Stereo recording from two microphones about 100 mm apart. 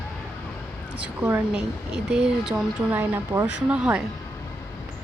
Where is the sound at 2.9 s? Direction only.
20° right (ahead or behind).